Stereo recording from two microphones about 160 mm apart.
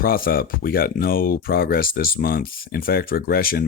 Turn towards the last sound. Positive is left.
turn(degrees=65)  # may be behind; listen again after turning